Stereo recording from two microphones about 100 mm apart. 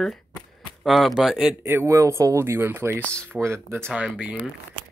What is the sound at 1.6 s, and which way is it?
Speech, 25° right (ahead or behind).